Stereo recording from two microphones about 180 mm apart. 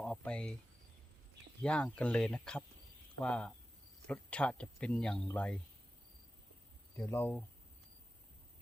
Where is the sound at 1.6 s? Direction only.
5° left (ahead or behind).